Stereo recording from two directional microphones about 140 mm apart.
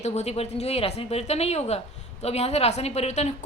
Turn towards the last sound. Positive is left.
turn(degrees=55)  # may be behind; listen again after turning